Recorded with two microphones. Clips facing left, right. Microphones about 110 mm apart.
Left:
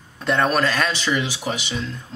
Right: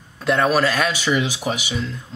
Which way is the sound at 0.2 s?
5° right (ahead or behind).